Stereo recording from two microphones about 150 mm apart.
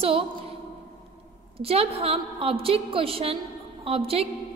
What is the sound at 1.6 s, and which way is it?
A woman's voice, 40° right (ahead or behind).